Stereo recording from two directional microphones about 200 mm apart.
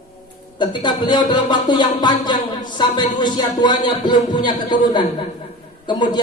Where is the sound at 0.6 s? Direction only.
20° left (ahead or behind).